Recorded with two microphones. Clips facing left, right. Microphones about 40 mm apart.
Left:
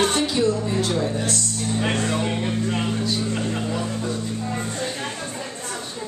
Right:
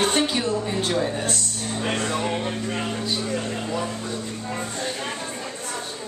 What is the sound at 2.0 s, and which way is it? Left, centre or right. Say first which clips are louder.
Speech: left 1 dB; centre.